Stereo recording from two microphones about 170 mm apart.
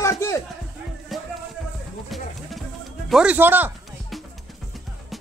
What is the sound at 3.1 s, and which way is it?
Speech, 5° right (ahead or behind).